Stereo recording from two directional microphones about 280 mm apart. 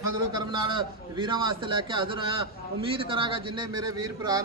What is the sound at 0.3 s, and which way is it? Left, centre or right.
A man's voice, centre.